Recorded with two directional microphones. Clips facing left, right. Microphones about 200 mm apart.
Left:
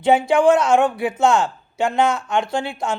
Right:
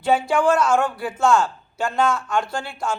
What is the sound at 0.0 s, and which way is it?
A woman's voice, 15° left (ahead or behind).